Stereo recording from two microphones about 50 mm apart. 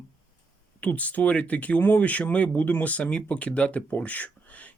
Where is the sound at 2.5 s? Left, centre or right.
Left.